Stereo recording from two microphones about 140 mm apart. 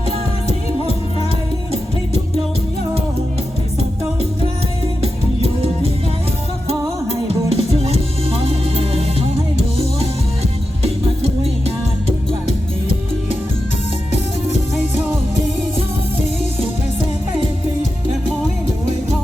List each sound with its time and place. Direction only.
4.9 s music: 45° right (ahead or behind)